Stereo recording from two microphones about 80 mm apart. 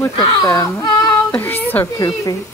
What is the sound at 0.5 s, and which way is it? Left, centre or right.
Speech, left.